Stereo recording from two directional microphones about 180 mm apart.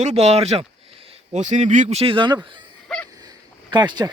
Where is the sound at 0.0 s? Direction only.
35° right (ahead or behind).